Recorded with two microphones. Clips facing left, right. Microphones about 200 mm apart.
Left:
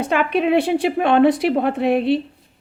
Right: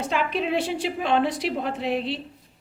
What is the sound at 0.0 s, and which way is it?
A woman's voice, 60° left (ahead or behind).